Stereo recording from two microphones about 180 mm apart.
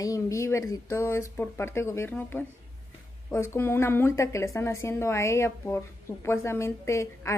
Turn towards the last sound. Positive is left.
turn(degrees=15)  # may be behind; listen again after turning